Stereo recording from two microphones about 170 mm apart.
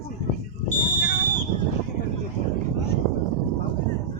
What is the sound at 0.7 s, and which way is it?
Fire alarm, 55° left (ahead or behind).